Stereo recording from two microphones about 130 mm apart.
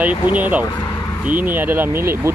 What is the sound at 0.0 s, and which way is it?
Speech, 10° right (ahead or behind).